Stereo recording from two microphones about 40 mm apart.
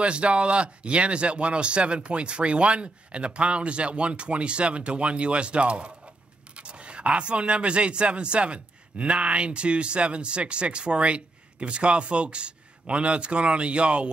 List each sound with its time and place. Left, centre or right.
0.0 s speech: right